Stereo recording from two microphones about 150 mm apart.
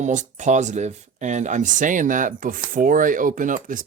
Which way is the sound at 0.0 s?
55° right (ahead or behind).